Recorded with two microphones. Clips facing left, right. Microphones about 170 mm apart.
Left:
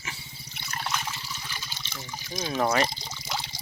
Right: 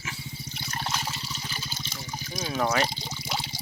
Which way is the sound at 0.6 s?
35° right (ahead or behind).